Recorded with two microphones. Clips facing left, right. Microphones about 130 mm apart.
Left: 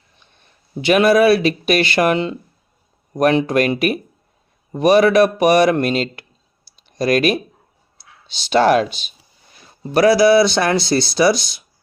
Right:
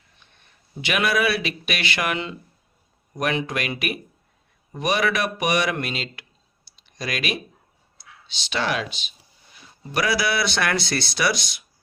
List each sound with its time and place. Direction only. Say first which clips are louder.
0.8 s speech: left 10 dB; 35° left (ahead or behind)